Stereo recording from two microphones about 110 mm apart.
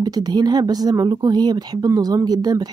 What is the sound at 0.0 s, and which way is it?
Speech, 40° right (ahead or behind).